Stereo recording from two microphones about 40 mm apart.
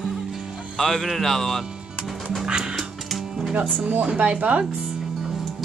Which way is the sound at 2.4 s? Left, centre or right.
Centre.